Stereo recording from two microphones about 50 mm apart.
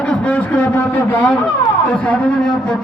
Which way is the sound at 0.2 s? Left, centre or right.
Left.